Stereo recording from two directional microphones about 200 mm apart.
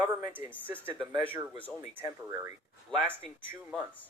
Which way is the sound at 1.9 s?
15° right (ahead or behind).